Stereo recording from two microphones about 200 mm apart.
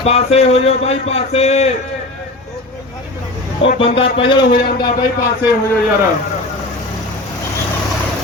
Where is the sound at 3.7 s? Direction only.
30° left (ahead or behind).